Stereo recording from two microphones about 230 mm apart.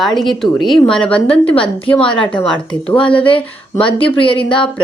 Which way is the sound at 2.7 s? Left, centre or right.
Left.